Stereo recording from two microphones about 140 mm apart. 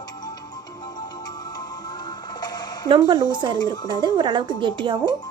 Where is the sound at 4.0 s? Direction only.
35° right (ahead or behind).